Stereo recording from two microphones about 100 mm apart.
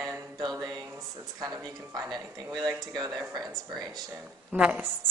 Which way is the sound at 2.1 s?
45° right (ahead or behind).